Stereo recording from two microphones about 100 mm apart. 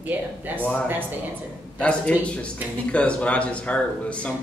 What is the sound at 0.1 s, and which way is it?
Speech, 20° right (ahead or behind).